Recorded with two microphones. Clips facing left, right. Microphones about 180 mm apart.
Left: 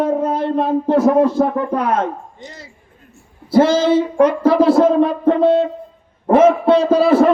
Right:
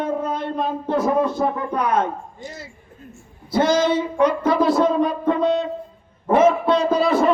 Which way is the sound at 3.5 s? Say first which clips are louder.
Left 5 dB; 30° left (ahead or behind).